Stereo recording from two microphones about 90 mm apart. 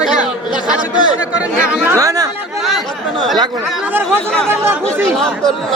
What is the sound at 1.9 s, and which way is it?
Speech, 40° right (ahead or behind).